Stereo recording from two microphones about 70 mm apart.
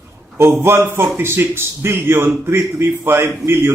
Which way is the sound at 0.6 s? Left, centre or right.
Right.